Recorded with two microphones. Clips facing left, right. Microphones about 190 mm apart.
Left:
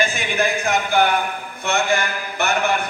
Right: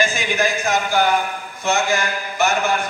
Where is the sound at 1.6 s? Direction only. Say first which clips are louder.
Right 1 dB; 60° left (ahead or behind).